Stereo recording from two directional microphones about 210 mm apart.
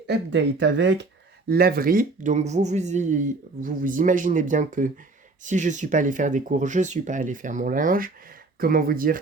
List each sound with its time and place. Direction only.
0.1 s speech: 55° right (ahead or behind)
1.5 s speech: 45° right (ahead or behind)